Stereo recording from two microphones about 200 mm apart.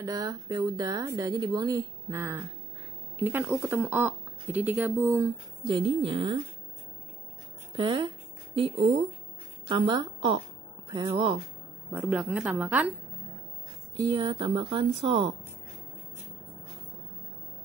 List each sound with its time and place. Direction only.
0.0 s a woman's voice: 20° right (ahead or behind)
7.7 s speech: 25° right (ahead or behind)
9.7 s a woman's voice: 25° right (ahead or behind)
11.9 s speech: 10° right (ahead or behind)
13.9 s a woman's voice: 25° right (ahead or behind)